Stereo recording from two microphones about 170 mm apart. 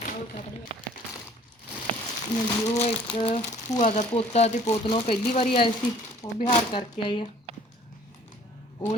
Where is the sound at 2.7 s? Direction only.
40° left (ahead or behind).